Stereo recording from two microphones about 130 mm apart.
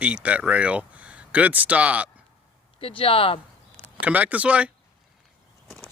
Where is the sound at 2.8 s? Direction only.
45° left (ahead or behind).